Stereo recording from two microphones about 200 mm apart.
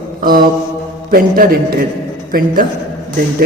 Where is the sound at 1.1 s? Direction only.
45° right (ahead or behind).